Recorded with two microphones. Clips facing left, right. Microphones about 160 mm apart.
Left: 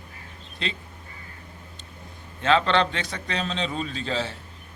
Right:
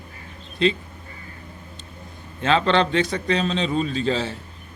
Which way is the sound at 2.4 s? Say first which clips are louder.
Right 2 dB; 35° right (ahead or behind).